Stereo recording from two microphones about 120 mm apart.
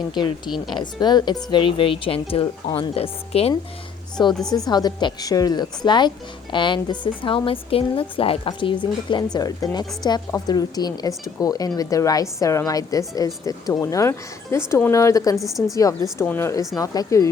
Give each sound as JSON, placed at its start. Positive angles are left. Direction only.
{"t": 0.2, "sound": "a woman's voice", "side_deg": 40}
{"t": 4.2, "sound": "a woman's voice", "side_deg": 40}
{"t": 15.4, "sound": "a woman's voice", "side_deg": 0}
{"t": 15.7, "sound": "speech", "side_deg": 30}